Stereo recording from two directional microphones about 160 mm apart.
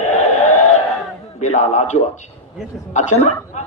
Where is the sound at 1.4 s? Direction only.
45° left (ahead or behind).